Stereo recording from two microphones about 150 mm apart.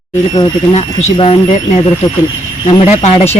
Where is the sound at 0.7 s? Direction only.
40° left (ahead or behind).